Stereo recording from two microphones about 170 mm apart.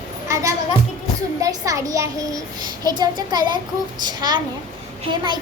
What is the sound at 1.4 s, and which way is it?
A child's voice, 20° right (ahead or behind).